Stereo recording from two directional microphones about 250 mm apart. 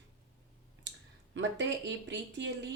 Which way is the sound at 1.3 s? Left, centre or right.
Right.